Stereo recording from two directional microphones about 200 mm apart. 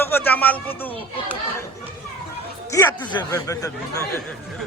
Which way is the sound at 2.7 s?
20° left (ahead or behind).